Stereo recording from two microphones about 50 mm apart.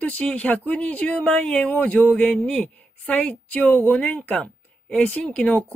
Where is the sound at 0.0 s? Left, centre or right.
Left.